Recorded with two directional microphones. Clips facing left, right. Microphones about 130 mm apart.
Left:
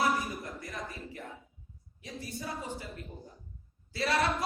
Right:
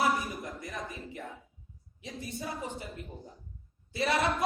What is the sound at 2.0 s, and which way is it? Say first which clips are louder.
A man's voice: right 1 dB; 20° right (ahead or behind).